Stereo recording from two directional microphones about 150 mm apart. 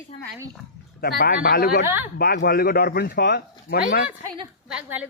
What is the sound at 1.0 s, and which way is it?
Speech, 90° left.